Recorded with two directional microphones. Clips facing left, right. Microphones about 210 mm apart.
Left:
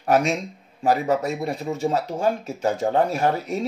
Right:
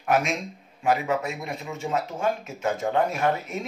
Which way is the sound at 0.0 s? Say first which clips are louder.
Left 4 dB; 35° left (ahead or behind).